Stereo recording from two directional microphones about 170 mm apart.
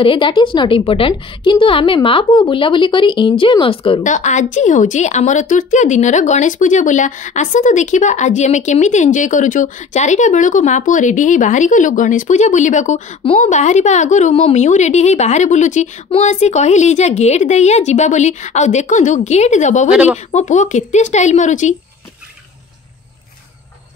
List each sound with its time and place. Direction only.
0.0 s a woman's voice: 30° left (ahead or behind)
4.0 s a woman's voice: 45° left (ahead or behind)
19.9 s a woman's voice: 10° right (ahead or behind)
20.2 s a woman's voice: 45° left (ahead or behind)